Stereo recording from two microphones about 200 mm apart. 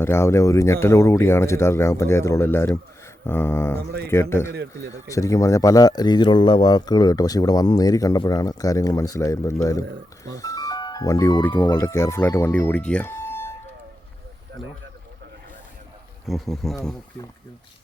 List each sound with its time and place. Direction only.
0.0 s speech: 10° left (ahead or behind)
14.6 s speech: centre (ahead or behind)
16.2 s speech: centre (ahead or behind)